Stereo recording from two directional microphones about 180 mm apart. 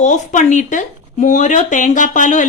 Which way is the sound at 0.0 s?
40° left (ahead or behind).